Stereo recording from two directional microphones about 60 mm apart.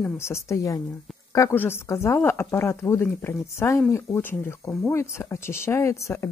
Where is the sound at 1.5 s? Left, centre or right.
Left.